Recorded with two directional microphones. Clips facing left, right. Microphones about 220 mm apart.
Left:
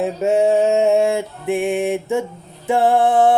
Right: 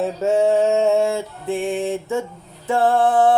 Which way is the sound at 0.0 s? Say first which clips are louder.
Left 1 dB; 15° left (ahead or behind).